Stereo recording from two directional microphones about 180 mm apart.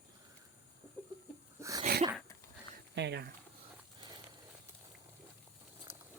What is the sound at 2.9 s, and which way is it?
Speech, 70° right (ahead or behind).